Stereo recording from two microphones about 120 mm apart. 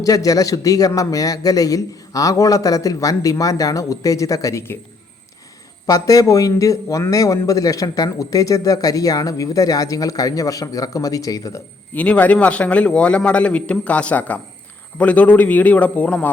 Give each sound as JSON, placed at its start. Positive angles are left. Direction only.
{"t": 0.0, "sound": "speech", "side_deg": 30}
{"t": 5.8, "sound": "speech", "side_deg": 30}
{"t": 11.9, "sound": "a man's voice", "side_deg": 10}